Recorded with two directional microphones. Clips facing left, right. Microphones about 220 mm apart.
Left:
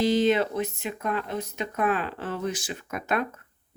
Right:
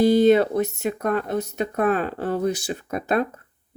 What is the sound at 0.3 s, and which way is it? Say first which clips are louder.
Speech: right 7 dB; 40° right (ahead or behind).